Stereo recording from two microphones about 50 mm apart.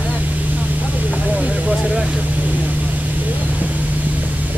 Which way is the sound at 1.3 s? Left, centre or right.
Right.